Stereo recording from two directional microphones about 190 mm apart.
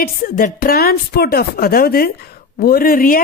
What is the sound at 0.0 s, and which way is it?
A woman's voice, 50° left (ahead or behind).